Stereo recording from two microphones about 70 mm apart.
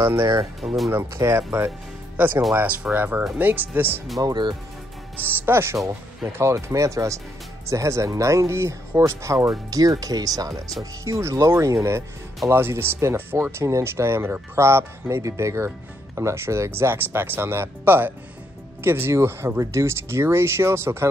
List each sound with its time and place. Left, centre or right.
0.6 s speech: right
4.2 s speech: right
5.2 s speech: right
10.8 s speech: right
12.4 s speech: right